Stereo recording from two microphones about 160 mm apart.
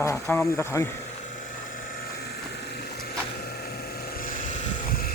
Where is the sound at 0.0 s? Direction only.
15° left (ahead or behind).